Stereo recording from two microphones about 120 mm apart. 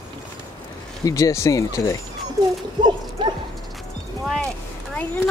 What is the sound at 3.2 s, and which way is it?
Dog, 40° right (ahead or behind).